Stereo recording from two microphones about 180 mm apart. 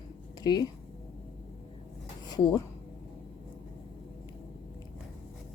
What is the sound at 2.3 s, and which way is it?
Speech, 25° left (ahead or behind).